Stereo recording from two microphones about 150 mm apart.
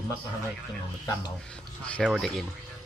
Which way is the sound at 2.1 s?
Centre (ahead or behind).